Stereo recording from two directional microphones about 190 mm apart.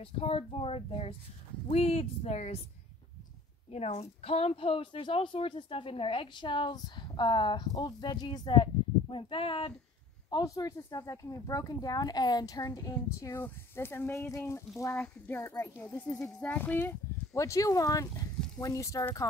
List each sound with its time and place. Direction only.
0.0 s speech: 30° left (ahead or behind)
3.7 s a woman's voice: 35° left (ahead or behind); by 19.2 s 15° left (ahead or behind)